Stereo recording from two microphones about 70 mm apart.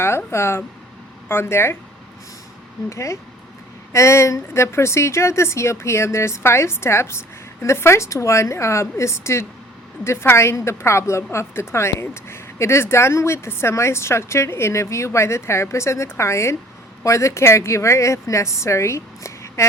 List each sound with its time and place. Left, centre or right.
0.3 s a woman's voice: left
2.9 s a woman's voice: left